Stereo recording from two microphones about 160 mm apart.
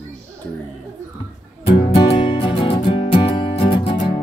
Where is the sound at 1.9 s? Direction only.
35° left (ahead or behind).